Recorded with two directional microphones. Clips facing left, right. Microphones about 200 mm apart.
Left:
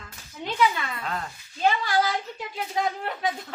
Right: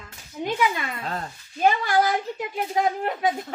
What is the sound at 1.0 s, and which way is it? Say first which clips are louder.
Speech: right 1 dB; 35° right (ahead or behind).